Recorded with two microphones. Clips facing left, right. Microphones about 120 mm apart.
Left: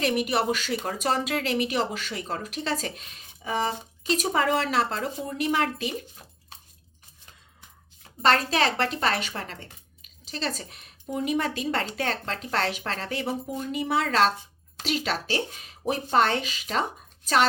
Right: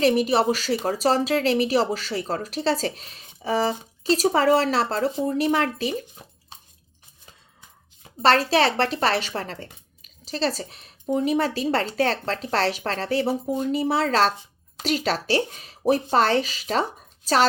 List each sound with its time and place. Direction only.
0.0 s speech: 35° right (ahead or behind)
8.2 s speech: 35° right (ahead or behind)